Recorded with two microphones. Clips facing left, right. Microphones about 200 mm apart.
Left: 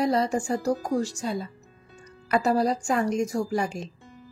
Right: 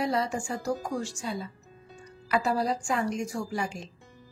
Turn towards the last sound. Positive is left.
turn(degrees=40)  # may be behind; listen again after turning